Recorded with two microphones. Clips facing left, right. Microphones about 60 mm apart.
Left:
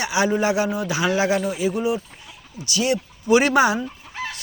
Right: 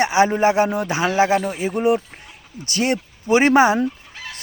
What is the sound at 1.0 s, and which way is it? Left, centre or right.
Speech, right.